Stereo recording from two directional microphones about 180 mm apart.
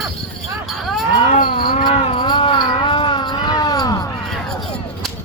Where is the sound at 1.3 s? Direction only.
50° left (ahead or behind).